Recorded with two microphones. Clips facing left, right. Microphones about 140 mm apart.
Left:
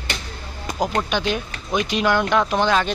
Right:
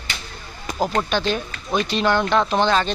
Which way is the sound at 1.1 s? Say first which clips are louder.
Right 1 dB; 10° left (ahead or behind).